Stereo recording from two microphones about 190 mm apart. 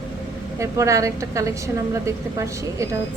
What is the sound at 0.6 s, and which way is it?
A woman's voice, 15° right (ahead or behind).